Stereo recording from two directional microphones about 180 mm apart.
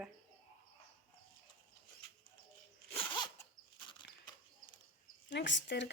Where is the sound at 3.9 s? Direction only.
25° left (ahead or behind).